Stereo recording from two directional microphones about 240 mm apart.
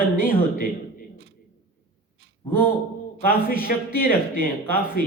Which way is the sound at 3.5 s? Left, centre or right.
Left.